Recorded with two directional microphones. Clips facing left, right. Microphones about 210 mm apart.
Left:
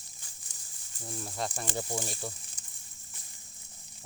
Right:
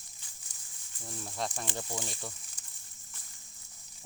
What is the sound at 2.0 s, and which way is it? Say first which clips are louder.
Speech: left 3 dB; 40° left (ahead or behind).